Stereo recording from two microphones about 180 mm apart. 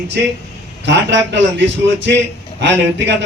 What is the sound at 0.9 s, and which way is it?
A man's voice, 85° right.